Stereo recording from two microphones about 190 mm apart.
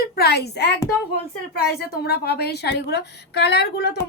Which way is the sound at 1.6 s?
55° left (ahead or behind).